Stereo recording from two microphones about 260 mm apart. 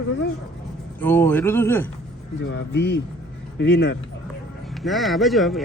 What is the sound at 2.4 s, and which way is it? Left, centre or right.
Speech, left.